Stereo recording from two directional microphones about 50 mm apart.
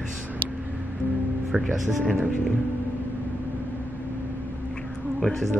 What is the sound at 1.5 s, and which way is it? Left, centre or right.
Speech, centre.